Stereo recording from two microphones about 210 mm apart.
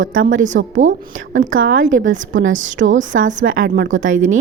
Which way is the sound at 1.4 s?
40° right (ahead or behind).